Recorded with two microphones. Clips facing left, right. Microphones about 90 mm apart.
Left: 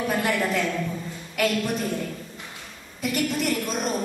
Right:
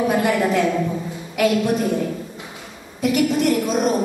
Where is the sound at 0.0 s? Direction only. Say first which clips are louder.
Right 6 dB; 5° right (ahead or behind).